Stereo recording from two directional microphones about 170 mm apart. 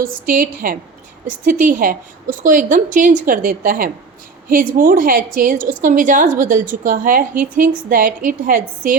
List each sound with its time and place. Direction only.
0.0 s a woman's voice: 55° right (ahead or behind)